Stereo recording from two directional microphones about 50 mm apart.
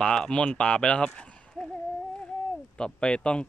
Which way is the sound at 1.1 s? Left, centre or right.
Left.